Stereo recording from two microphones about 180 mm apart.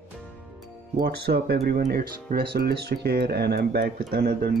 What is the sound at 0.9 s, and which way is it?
Speech, 60° right (ahead or behind).